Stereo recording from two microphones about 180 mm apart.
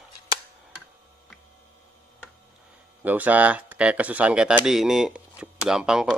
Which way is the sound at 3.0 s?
10° right (ahead or behind).